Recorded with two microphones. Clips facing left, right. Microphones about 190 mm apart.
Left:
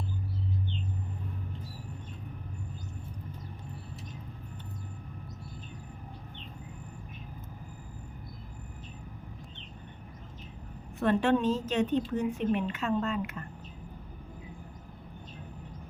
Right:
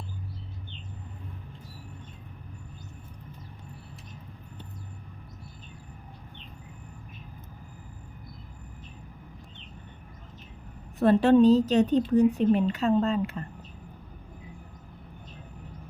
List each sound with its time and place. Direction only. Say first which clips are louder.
11.0 s speech: right 7 dB; 35° right (ahead or behind)